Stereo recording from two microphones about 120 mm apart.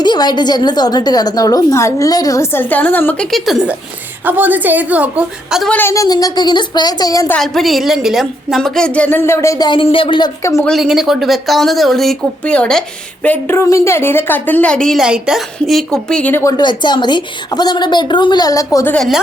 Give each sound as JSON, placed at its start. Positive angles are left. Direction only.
{"t": 0.0, "sound": "a woman's voice", "side_deg": 35}
{"t": 3.2, "sound": "a woman's voice", "side_deg": 0}
{"t": 5.6, "sound": "a woman's voice", "side_deg": 15}
{"t": 5.9, "sound": "a woman's voice", "side_deg": 30}
{"t": 7.3, "sound": "a woman's voice", "side_deg": 0}
{"t": 9.6, "sound": "speech", "side_deg": 45}
{"t": 10.6, "sound": "a woman's voice", "side_deg": 0}
{"t": 16.3, "sound": "speech", "side_deg": 25}
{"t": 16.6, "sound": "a woman's voice", "side_deg": 40}
{"t": 18.9, "sound": "a woman's voice", "side_deg": 0}